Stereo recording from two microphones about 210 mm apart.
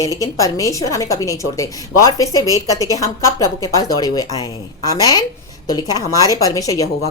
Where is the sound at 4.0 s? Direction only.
15° left (ahead or behind).